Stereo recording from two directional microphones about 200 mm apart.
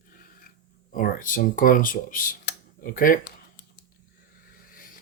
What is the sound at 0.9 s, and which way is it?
Speech, 45° left (ahead or behind).